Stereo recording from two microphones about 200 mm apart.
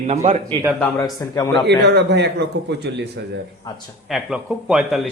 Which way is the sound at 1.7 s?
55° right (ahead or behind).